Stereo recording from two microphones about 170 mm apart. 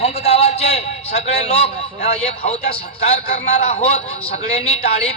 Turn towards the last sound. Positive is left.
turn(degrees=40)  # may be behind; listen again after turning